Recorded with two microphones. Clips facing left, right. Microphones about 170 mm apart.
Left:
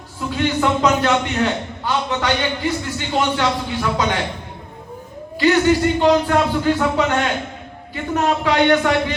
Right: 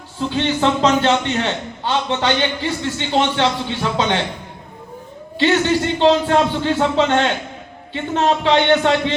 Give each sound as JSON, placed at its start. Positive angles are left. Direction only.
{"t": 0.2, "sound": "a man's voice", "side_deg": -25}
{"t": 5.4, "sound": "a man's voice", "side_deg": -25}